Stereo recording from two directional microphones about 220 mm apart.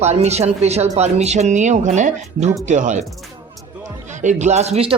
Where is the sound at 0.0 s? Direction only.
30° right (ahead or behind).